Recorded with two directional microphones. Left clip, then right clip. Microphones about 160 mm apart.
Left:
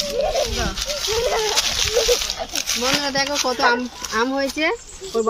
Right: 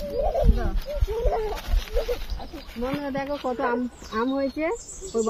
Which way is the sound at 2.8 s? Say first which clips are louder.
Left 7 dB; 25° left (ahead or behind).